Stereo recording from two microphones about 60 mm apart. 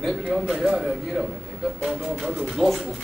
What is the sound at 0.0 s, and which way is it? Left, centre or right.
Speech, centre.